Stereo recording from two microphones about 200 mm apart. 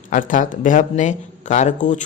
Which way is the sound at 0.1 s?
40° left (ahead or behind).